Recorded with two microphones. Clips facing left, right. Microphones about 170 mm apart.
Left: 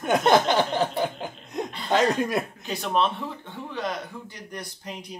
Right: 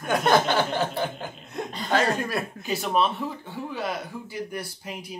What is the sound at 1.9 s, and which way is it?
Chuckle, 20° left (ahead or behind).